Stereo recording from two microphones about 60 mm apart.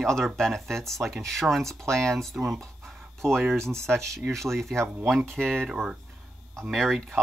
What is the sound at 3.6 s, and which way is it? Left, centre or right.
Speech, right.